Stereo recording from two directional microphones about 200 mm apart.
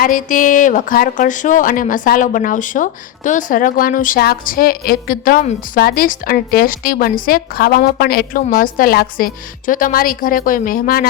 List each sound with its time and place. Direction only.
0.0 s speech: 40° left (ahead or behind)